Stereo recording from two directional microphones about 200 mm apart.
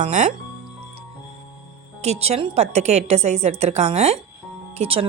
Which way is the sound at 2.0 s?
30° right (ahead or behind).